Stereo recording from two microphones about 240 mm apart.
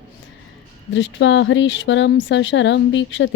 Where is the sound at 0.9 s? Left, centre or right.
Left.